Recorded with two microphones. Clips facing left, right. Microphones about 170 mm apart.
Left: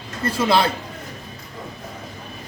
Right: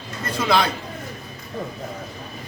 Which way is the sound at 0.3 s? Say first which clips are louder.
Left 1 dB; 30° left (ahead or behind).